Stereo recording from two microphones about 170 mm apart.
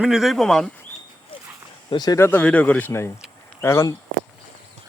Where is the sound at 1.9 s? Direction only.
25° left (ahead or behind).